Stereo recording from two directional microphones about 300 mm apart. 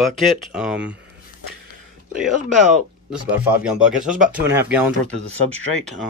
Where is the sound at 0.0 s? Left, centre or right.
Centre.